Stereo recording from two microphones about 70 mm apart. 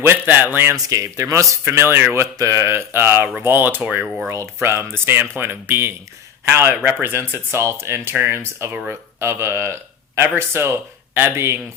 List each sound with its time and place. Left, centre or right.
0.0 s speech: right
0.7 s speech: right
1.6 s speech: right
2.1 s speech: right
4.0 s speech: centre
4.3 s speech: right